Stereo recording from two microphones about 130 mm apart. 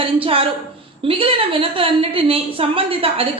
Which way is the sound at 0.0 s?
45° right (ahead or behind).